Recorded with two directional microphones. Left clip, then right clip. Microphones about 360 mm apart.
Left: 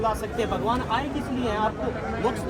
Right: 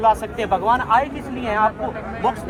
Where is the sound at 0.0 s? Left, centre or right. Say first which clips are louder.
Right 8 dB; right.